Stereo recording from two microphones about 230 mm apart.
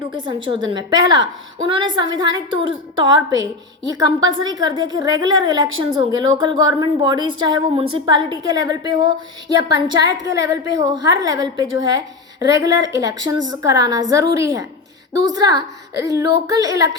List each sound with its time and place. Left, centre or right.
0.3 s a woman's voice: centre
10.1 s a woman's voice: centre